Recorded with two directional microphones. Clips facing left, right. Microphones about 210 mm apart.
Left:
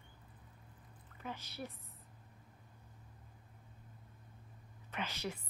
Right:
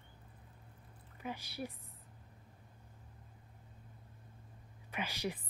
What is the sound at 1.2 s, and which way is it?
Speech, 10° right (ahead or behind).